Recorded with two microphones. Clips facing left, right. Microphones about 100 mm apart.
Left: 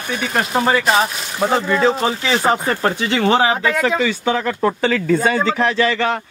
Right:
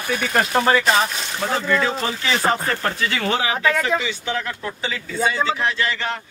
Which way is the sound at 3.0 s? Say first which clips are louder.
Left 7 dB; 30° left (ahead or behind).